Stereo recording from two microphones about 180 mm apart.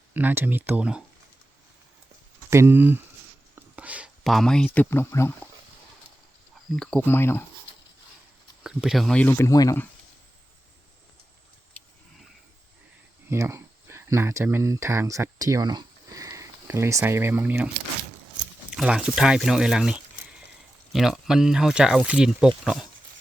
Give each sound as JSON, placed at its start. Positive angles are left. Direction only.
{"t": 0.1, "sound": "speech", "side_deg": -10}
{"t": 2.5, "sound": "speech", "side_deg": -15}
{"t": 6.7, "sound": "speech", "side_deg": 5}
{"t": 8.6, "sound": "speech", "side_deg": -5}
{"t": 9.5, "sound": "speech", "side_deg": 20}
{"t": 11.8, "sound": "a sound", "side_deg": 5}
{"t": 13.3, "sound": "speech", "side_deg": -15}
{"t": 18.7, "sound": "speech", "side_deg": -5}